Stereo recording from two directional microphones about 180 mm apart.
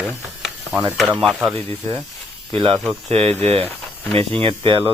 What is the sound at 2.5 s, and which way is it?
Speech, 30° right (ahead or behind).